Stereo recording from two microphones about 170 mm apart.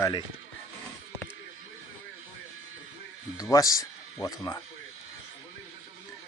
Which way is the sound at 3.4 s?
20° left (ahead or behind).